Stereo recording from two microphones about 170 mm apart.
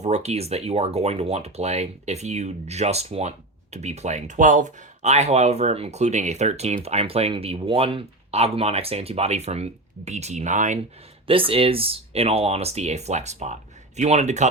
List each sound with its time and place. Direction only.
0.0 s speech: 40° right (ahead or behind)
11.3 s speech: 35° right (ahead or behind)